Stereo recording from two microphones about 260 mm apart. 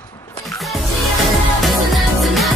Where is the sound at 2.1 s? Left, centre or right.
Centre.